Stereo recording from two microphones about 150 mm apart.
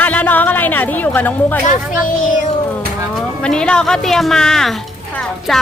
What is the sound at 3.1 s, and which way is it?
Speech, 5° left (ahead or behind).